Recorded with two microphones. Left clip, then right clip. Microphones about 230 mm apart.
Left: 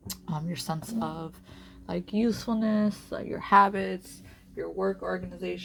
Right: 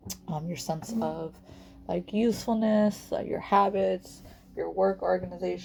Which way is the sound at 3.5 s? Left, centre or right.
Left.